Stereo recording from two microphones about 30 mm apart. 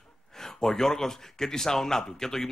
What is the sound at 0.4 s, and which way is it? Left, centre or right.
A man's voice, centre.